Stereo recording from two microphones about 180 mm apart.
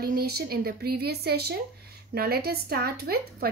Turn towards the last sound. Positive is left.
turn(degrees=-60)  # may be behind; listen again after turning